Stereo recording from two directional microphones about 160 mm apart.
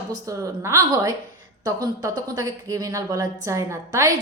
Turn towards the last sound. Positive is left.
turn(degrees=-20)  # may be behind; listen again after turning